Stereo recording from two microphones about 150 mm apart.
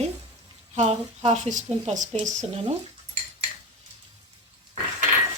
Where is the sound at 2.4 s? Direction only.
40° right (ahead or behind).